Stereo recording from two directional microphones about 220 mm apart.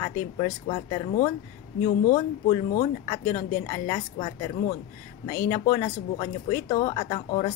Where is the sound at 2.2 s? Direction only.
25° left (ahead or behind).